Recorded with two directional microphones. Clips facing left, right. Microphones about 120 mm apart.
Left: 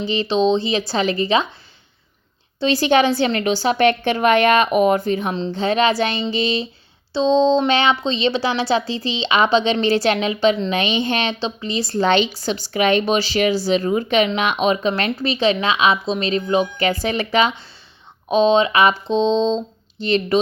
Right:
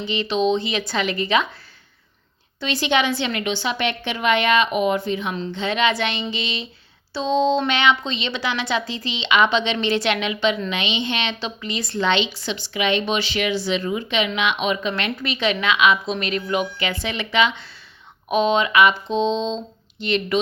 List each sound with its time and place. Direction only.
0.0 s speech: 35° left (ahead or behind)
2.6 s a woman's voice: 35° left (ahead or behind)
7.1 s speech: 25° left (ahead or behind); by 11.3 s 40° left (ahead or behind)
11.3 s speech: 30° left (ahead or behind)
18.3 s speech: 30° left (ahead or behind)